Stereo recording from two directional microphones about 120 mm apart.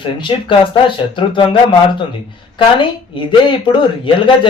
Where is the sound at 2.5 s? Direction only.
45° left (ahead or behind).